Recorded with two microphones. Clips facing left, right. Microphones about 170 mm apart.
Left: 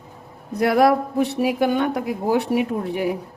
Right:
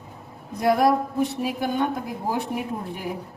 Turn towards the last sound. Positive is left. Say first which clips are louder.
# left 8 dB
turn(degrees=75)  # may be behind; listen again after turning